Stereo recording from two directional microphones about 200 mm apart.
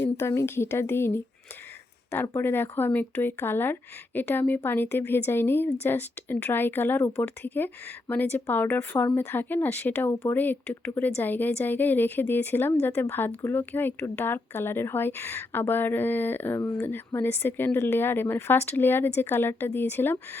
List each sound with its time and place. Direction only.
0.2 s a woman's voice: 15° left (ahead or behind)